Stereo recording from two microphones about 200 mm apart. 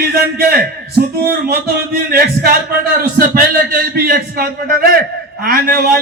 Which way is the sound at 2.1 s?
50° right (ahead or behind).